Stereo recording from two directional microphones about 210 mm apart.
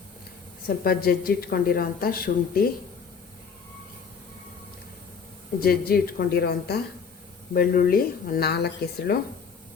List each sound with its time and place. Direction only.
0.9 s speech: 45° left (ahead or behind)
5.5 s speech: 45° left (ahead or behind)